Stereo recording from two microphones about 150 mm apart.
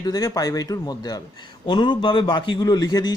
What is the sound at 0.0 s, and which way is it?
Speech, 25° left (ahead or behind).